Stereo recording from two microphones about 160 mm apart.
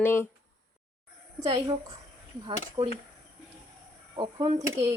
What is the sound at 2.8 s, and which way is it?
Speech, 45° right (ahead or behind).